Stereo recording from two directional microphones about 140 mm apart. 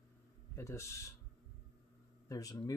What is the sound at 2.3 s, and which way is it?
Speech, 25° left (ahead or behind).